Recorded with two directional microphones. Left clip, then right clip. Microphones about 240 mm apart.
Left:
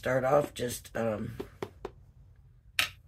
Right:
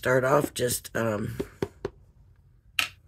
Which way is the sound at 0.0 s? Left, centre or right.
Right.